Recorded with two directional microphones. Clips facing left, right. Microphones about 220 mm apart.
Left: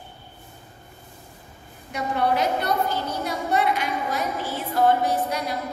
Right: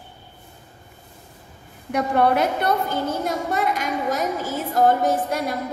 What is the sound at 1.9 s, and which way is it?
A woman's voice, 55° right (ahead or behind).